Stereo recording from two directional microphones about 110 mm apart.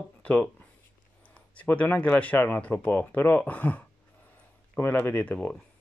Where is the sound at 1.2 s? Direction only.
10° left (ahead or behind).